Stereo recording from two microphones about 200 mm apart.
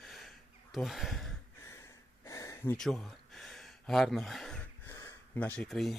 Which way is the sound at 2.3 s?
15° left (ahead or behind).